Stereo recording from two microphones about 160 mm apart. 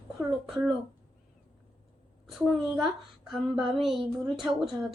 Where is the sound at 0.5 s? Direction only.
Centre (ahead or behind).